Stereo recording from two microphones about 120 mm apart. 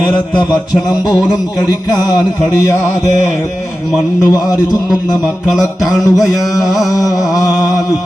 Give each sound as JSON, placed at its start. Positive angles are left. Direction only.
{"t": 0.3, "sound": "speech", "side_deg": 35}
{"t": 4.2, "sound": "speech", "side_deg": 35}
{"t": 6.0, "sound": "a sound", "side_deg": 30}